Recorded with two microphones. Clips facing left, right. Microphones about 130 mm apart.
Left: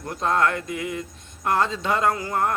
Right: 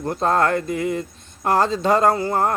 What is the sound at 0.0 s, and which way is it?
Speech, 35° right (ahead or behind).